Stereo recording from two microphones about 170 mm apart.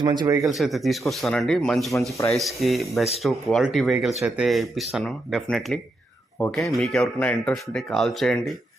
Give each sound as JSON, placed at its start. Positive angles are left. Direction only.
{"t": 0.0, "sound": "speech", "side_deg": -25}
{"t": 0.3, "sound": "speech", "side_deg": 0}